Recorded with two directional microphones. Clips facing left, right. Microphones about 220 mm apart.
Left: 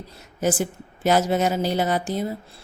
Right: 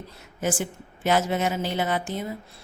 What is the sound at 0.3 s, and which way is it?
Speech, 40° left (ahead or behind).